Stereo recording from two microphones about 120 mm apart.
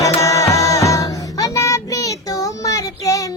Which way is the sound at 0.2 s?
25° left (ahead or behind).